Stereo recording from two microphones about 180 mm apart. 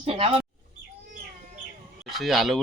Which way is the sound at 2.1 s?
Centre (ahead or behind).